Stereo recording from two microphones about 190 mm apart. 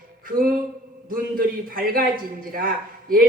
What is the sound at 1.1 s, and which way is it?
A man's voice, 50° right (ahead or behind).